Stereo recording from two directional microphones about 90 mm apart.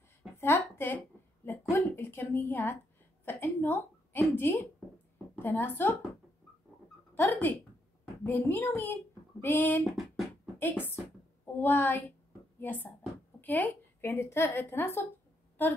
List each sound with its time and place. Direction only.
0.4 s a sound: 25° left (ahead or behind)
3.3 s a woman's voice: 25° left (ahead or behind)
7.2 s a woman's voice: 20° left (ahead or behind)
9.8 s beatboxing: centre (ahead or behind)
10.6 s a woman's voice: 20° left (ahead or behind)